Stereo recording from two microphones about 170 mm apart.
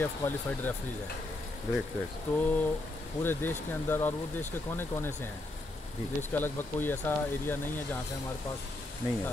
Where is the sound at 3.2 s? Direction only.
10° left (ahead or behind).